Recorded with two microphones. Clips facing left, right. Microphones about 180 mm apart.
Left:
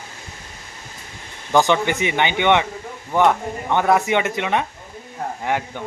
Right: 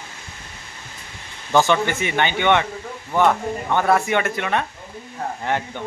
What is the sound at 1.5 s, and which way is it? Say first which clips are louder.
Speech: left 1 dB; 15° left (ahead or behind).